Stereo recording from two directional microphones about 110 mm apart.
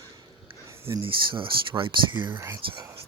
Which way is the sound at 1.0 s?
50° right (ahead or behind).